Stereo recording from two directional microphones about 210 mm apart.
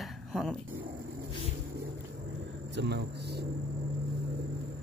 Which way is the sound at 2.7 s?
50° right (ahead or behind).